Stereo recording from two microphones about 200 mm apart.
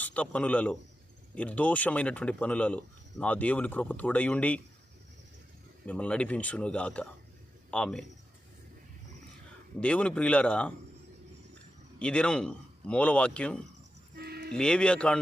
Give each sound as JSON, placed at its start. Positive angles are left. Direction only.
{"t": 0.0, "sound": "a man's voice", "side_deg": 5}
{"t": 5.8, "sound": "speech", "side_deg": 5}
{"t": 9.8, "sound": "speech", "side_deg": 5}
{"t": 11.9, "sound": "speech", "side_deg": 5}
{"t": 14.2, "sound": "music", "side_deg": -50}
{"t": 14.5, "sound": "speech", "side_deg": 5}